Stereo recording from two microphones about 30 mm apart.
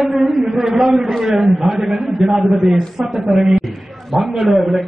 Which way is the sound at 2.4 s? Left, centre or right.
Centre.